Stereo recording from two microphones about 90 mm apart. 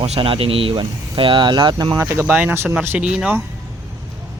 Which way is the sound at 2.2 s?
15° right (ahead or behind).